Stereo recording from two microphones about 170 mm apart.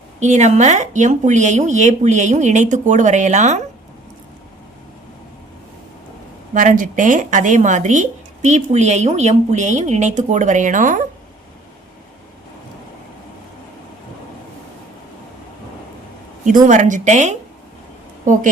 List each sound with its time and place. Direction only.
0.2 s speech: 45° right (ahead or behind)
6.5 s speech: 50° right (ahead or behind)
16.6 s speech: 45° right (ahead or behind)